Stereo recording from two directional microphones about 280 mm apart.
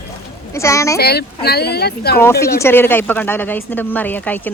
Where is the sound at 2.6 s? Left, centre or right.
Centre.